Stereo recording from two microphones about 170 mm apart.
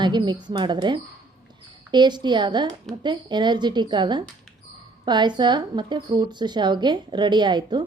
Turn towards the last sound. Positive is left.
turn(degrees=-25)  # may be behind; listen again after turning